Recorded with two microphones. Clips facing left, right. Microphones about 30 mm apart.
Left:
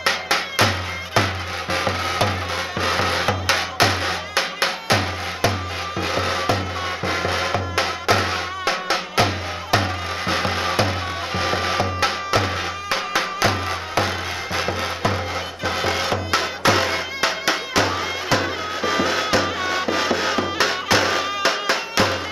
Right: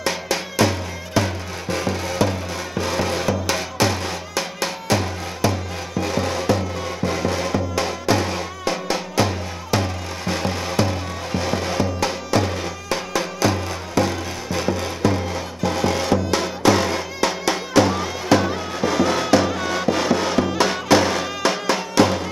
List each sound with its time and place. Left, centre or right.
0.0 s music: left